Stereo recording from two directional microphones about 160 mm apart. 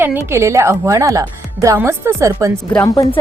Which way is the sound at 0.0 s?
15° right (ahead or behind).